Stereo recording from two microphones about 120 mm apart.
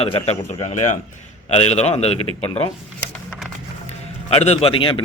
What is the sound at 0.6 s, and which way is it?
Speech, 70° left (ahead or behind).